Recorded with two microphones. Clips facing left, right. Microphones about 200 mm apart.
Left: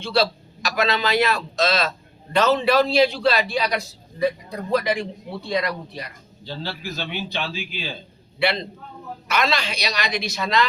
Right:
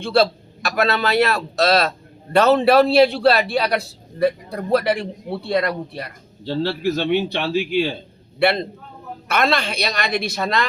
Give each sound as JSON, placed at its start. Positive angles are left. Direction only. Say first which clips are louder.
{"t": 0.0, "sound": "a man's voice", "louder": "right 4 dB", "side_deg": -55}